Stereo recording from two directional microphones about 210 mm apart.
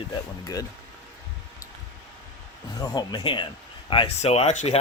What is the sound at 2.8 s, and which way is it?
Speech, 20° left (ahead or behind).